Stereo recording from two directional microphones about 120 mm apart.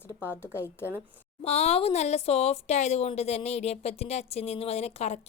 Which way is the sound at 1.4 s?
60° left (ahead or behind).